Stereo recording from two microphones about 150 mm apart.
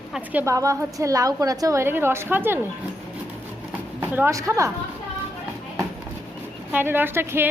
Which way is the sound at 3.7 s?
10° right (ahead or behind).